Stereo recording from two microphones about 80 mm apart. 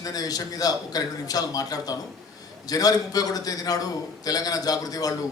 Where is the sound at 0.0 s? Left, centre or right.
Left.